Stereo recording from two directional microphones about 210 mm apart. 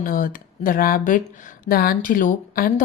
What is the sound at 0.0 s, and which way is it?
A woman's voice, 40° left (ahead or behind).